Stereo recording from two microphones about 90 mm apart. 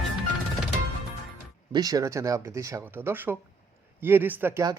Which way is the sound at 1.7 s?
45° right (ahead or behind).